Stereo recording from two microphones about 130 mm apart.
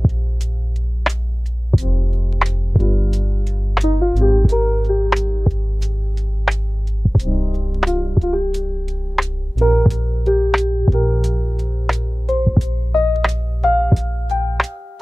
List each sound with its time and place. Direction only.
1.0 s music: centre (ahead or behind)